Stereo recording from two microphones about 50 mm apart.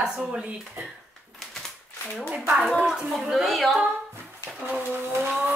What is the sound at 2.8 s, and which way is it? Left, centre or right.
Speech, centre.